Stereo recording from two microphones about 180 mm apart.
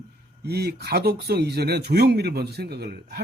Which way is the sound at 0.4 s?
60° right (ahead or behind).